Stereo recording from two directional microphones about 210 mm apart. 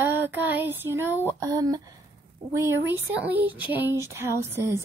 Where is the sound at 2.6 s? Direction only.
10° right (ahead or behind).